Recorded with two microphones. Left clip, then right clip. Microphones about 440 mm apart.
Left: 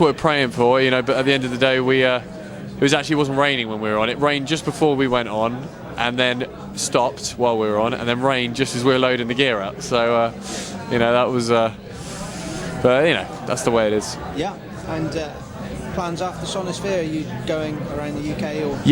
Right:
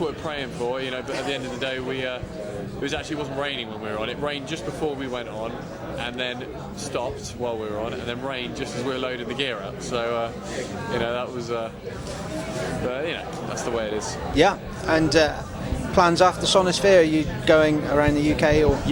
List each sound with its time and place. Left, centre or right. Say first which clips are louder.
0.0 s speech: left 11 dB; left
12.9 s speech: left 11 dB; left
14.3 s a man's voice: right 10 dB; right